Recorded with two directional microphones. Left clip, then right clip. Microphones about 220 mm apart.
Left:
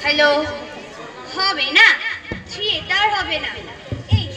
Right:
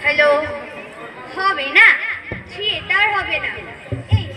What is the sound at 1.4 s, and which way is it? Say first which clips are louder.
Speech: right 1 dB; 45° left (ahead or behind).